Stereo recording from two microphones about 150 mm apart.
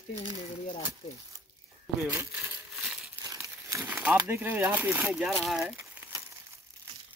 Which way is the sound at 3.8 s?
10° right (ahead or behind).